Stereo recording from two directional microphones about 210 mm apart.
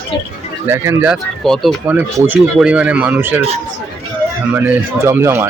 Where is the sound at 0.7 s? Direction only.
10° right (ahead or behind).